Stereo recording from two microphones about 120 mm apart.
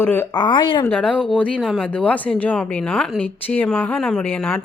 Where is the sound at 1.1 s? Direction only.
Centre (ahead or behind).